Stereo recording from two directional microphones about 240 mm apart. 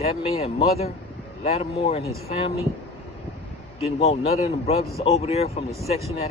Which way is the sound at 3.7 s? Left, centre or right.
Left.